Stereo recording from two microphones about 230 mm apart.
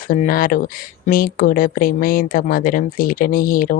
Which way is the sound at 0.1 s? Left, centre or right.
Left.